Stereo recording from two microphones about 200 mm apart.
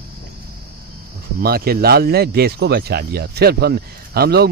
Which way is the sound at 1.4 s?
50° right (ahead or behind).